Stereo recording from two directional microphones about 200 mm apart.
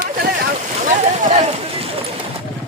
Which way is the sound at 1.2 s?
35° right (ahead or behind).